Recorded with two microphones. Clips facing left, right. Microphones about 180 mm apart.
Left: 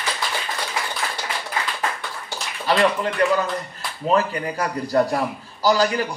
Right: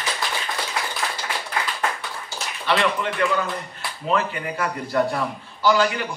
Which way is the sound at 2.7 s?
40° left (ahead or behind).